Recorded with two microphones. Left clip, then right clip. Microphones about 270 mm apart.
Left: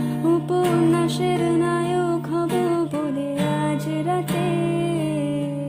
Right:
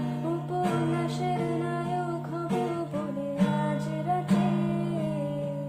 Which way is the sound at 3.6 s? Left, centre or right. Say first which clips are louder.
Left 7 dB; left.